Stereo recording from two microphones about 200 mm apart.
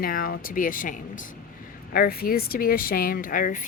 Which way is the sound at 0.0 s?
45° left (ahead or behind).